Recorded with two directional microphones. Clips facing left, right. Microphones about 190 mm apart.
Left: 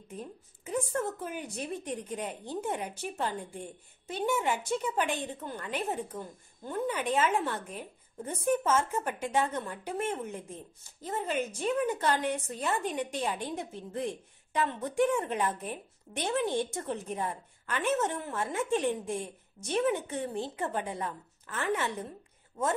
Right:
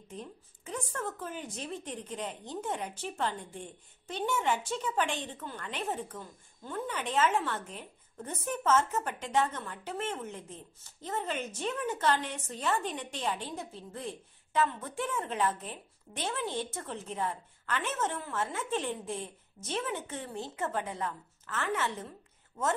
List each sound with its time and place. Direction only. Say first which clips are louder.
0.1 s a woman's voice: left 2 dB; 10° left (ahead or behind)